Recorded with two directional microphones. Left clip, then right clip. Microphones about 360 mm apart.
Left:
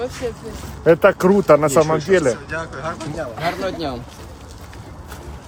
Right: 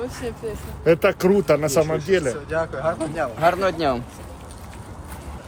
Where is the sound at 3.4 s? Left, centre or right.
Right.